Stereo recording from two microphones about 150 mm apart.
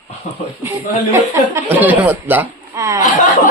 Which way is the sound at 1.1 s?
15° right (ahead or behind).